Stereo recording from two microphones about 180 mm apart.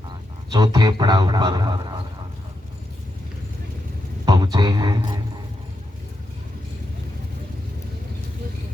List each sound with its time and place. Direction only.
0.5 s a man's voice: 25° right (ahead or behind)
4.5 s a man's voice: 25° right (ahead or behind)